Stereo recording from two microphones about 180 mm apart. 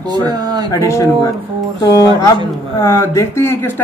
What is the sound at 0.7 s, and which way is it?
Speech, 15° left (ahead or behind).